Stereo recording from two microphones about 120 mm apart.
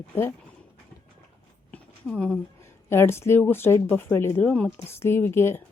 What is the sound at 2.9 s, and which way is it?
A woman's voice, 20° left (ahead or behind).